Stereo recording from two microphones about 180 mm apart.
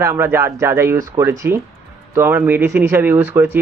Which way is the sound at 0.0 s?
15° right (ahead or behind).